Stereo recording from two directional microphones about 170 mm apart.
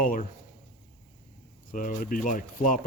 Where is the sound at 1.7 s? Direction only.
50° left (ahead or behind).